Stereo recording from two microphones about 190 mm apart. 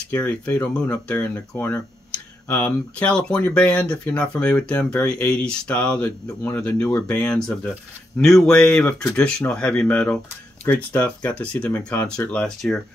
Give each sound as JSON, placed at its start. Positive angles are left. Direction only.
{"t": 0.1, "sound": "speech", "side_deg": 10}